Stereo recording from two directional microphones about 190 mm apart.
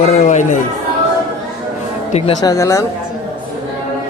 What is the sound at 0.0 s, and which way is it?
Speech, 35° left (ahead or behind).